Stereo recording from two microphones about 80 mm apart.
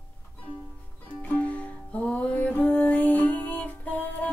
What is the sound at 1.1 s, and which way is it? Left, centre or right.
Music, centre.